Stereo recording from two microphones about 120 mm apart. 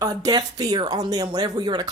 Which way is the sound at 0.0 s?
30° right (ahead or behind).